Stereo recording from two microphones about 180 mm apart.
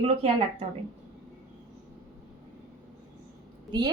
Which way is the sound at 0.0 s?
30° right (ahead or behind).